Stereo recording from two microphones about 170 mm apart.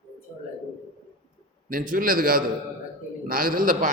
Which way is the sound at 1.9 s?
55° right (ahead or behind).